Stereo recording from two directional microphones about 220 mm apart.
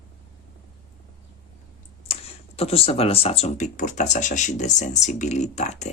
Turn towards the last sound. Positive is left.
turn(degrees=30)  # may be behind; listen again after turning